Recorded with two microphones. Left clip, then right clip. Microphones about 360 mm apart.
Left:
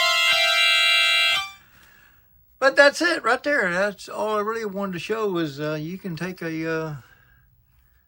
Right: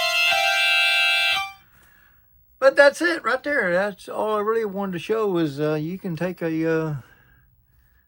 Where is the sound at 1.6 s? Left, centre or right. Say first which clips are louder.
Left 3 dB; centre.